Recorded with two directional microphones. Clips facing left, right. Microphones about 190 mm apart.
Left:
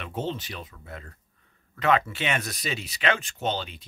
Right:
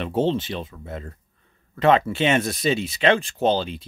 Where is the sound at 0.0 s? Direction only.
30° right (ahead or behind).